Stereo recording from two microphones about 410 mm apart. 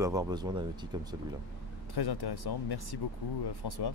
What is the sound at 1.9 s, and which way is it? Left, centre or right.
Speech, left.